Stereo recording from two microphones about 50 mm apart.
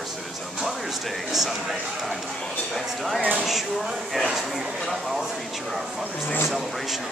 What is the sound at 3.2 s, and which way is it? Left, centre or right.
Speech, right.